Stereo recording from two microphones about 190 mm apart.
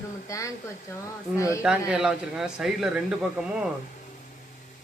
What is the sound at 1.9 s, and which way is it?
Speech, 5° right (ahead or behind).